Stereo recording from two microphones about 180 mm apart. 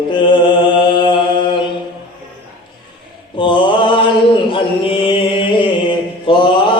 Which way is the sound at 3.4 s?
25° left (ahead or behind).